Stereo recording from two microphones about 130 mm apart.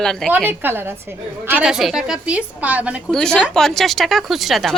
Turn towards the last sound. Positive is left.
turn(degrees=0)  # may be behind; listen again after turning